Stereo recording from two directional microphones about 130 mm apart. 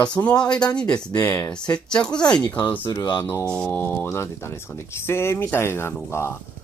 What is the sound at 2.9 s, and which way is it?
Speech, 30° left (ahead or behind).